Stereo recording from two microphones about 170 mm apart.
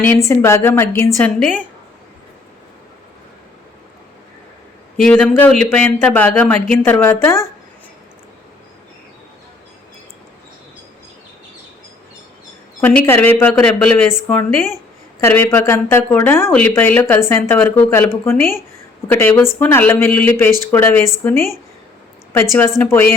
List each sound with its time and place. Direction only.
0.3 s speech: 15° left (ahead or behind)
4.9 s speech: 5° left (ahead or behind)
12.8 s speech: 10° left (ahead or behind)
22.8 s speech: 15° left (ahead or behind)